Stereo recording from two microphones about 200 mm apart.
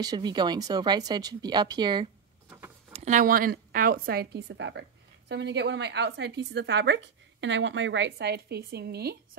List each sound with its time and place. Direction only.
0.0 s speech: 20° right (ahead or behind)
2.9 s a woman's voice: 35° right (ahead or behind); by 9.4 s 55° right (ahead or behind)